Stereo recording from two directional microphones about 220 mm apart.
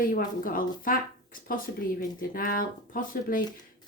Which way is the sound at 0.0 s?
40° left (ahead or behind).